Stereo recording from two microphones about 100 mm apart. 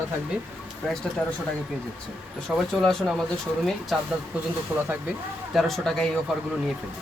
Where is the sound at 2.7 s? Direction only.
5° left (ahead or behind).